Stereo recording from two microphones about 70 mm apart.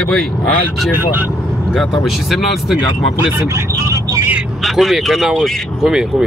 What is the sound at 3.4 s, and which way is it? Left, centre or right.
Speech, right.